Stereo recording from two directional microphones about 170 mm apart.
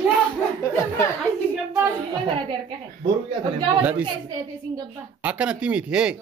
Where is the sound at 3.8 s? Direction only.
10° right (ahead or behind).